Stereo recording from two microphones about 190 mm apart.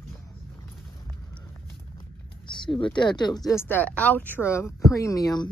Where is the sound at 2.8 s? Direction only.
25° left (ahead or behind).